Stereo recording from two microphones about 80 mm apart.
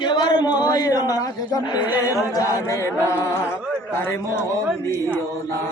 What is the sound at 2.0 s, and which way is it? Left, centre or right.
Chant, left.